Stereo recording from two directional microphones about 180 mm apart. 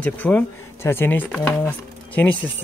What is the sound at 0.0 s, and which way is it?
Speech, 10° left (ahead or behind).